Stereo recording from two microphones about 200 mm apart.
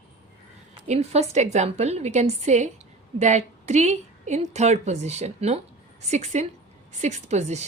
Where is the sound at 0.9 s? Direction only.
30° right (ahead or behind).